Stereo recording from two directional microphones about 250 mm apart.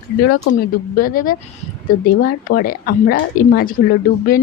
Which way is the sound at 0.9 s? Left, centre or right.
Left.